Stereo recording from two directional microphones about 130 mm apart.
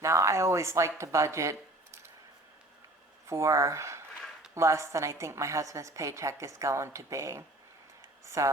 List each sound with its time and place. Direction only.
0.0 s a woman's voice: 25° right (ahead or behind)
3.2 s a woman's voice: 20° right (ahead or behind)